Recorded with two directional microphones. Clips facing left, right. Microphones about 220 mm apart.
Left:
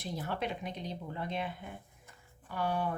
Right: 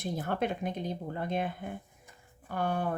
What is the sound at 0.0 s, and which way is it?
Speech, 50° right (ahead or behind).